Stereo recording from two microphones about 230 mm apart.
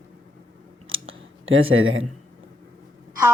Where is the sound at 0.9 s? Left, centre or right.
Right.